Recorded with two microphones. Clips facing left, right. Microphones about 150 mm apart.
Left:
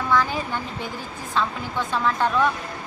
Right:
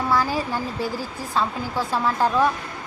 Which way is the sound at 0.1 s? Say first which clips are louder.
Left 1 dB; 35° right (ahead or behind).